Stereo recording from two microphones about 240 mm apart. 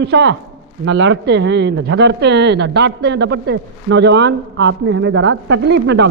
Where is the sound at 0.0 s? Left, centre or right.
Right.